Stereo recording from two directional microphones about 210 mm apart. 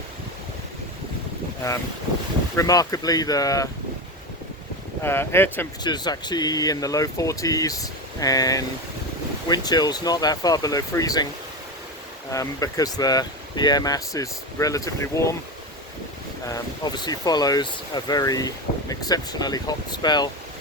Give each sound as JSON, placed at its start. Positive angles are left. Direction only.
{"t": 2.6, "sound": "speech", "side_deg": 15}
{"t": 5.0, "sound": "speech", "side_deg": 10}
{"t": 12.3, "sound": "speech", "side_deg": 15}
{"t": 16.5, "sound": "speech", "side_deg": 20}